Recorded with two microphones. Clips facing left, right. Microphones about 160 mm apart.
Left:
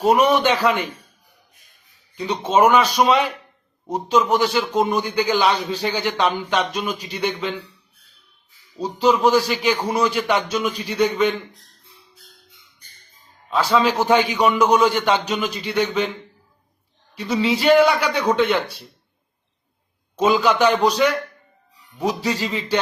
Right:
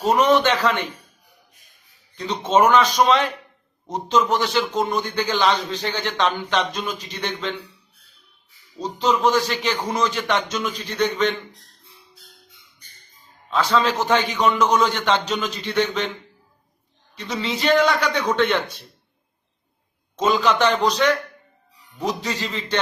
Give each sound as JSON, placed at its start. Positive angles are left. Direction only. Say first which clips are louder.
{"t": 0.0, "sound": "a man's voice", "louder": "left 1 dB", "side_deg": 10}
{"t": 2.1, "sound": "a man's voice", "louder": "left 1 dB", "side_deg": 10}
{"t": 8.8, "sound": "a man's voice", "louder": "left 3 dB", "side_deg": 10}
{"t": 13.5, "sound": "a man's voice", "louder": "left 2 dB", "side_deg": 10}
{"t": 17.2, "sound": "a man's voice", "louder": "left 6 dB", "side_deg": 10}
{"t": 20.1, "sound": "a man's voice", "louder": "left 2 dB", "side_deg": 10}